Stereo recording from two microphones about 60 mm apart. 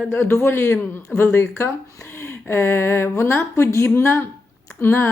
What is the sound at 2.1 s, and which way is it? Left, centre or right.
Speech, left.